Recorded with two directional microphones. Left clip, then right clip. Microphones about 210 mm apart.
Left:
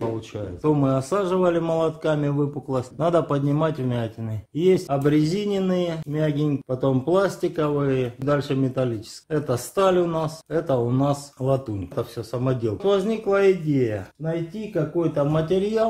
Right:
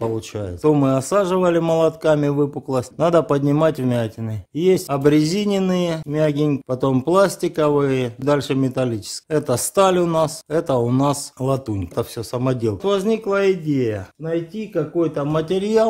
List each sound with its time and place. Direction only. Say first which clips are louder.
0.6 s speech: right 5 dB; 45° right (ahead or behind)
4.8 s speech: right 4 dB; 55° right (ahead or behind)